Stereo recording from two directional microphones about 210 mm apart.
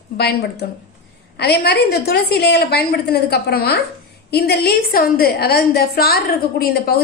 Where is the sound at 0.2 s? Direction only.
50° left (ahead or behind).